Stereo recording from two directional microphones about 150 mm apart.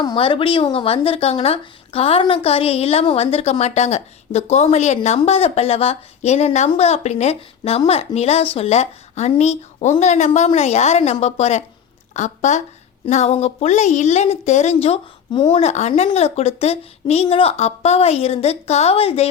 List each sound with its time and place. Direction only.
0.0 s speech: 30° left (ahead or behind)